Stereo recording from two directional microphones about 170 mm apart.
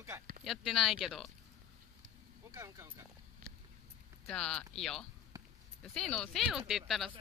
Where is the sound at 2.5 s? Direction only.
15° right (ahead or behind).